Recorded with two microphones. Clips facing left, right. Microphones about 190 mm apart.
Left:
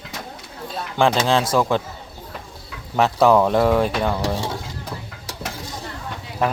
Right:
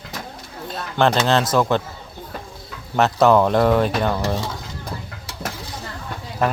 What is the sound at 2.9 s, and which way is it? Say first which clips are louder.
Speech: even; 5° left (ahead or behind).